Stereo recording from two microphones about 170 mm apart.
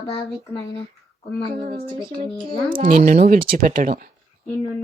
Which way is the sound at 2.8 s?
55° right (ahead or behind).